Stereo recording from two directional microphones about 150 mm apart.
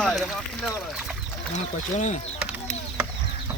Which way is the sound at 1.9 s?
55° left (ahead or behind).